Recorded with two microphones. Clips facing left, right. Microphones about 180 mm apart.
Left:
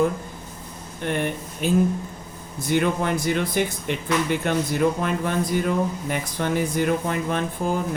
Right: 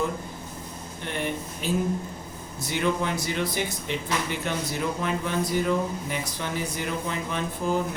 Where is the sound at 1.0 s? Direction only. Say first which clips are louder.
Left 5 dB; 55° left (ahead or behind).